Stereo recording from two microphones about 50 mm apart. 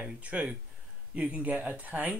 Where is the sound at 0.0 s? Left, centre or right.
Right.